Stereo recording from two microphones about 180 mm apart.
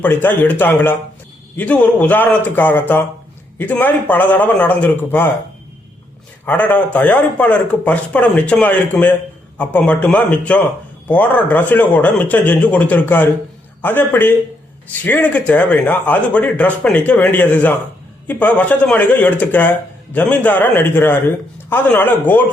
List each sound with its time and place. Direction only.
0.0 s speech: 10° left (ahead or behind)
6.4 s speech: 10° left (ahead or behind)